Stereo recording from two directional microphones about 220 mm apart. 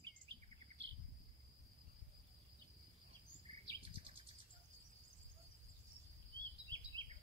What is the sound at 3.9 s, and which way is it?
Bird, 25° right (ahead or behind).